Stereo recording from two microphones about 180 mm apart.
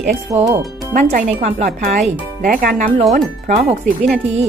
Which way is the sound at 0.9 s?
55° right (ahead or behind).